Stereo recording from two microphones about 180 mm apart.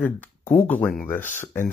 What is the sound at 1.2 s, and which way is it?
Speech, 45° left (ahead or behind).